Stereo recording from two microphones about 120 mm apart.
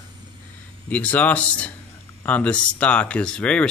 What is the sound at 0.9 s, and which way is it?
Speech, 15° left (ahead or behind).